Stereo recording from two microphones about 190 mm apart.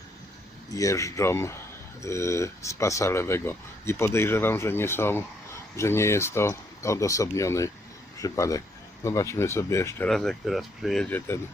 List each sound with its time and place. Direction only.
0.7 s speech: 15° left (ahead or behind)
10.1 s speech: centre (ahead or behind)